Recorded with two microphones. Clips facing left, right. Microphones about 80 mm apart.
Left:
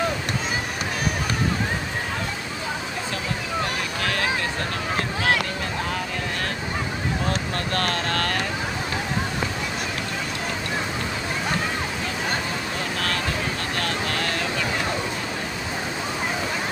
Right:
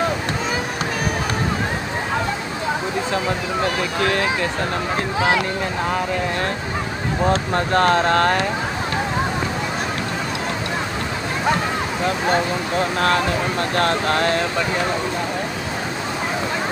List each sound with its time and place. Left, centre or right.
7.2 s speech: right
13.7 s speech: right